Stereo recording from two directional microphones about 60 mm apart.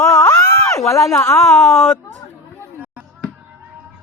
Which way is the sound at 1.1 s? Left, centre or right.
Left.